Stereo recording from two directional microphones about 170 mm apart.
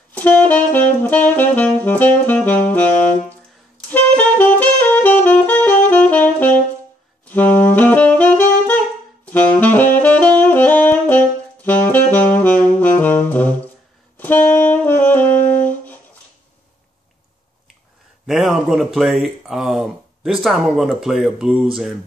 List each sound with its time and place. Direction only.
0.1 s saxophone: 10° left (ahead or behind)
18.2 s speech: centre (ahead or behind)